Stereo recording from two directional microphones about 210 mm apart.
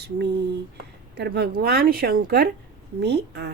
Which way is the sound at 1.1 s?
50° right (ahead or behind).